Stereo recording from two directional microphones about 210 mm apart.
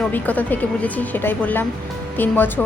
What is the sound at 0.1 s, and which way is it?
A woman's voice, 10° left (ahead or behind).